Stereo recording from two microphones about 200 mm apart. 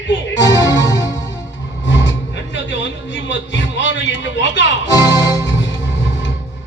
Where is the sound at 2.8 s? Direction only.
65° left (ahead or behind).